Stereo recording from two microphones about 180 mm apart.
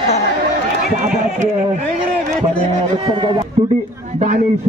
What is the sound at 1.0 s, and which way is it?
Speech, 45° right (ahead or behind).